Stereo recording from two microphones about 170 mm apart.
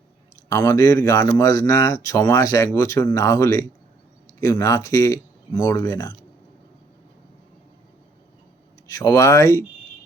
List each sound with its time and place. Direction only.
0.4 s speech: 20° left (ahead or behind)
8.9 s speech: 20° left (ahead or behind)